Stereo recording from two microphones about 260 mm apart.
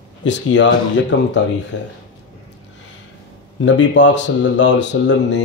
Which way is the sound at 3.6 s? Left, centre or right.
Left.